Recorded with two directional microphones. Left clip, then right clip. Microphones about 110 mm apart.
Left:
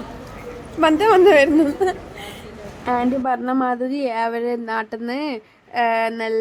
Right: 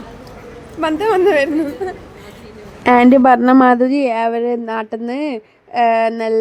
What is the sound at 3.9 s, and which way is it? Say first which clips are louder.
Speech: right 6 dB; 40° right (ahead or behind).